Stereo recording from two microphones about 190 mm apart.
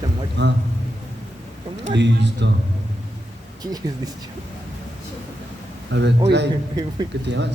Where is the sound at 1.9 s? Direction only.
65° right (ahead or behind).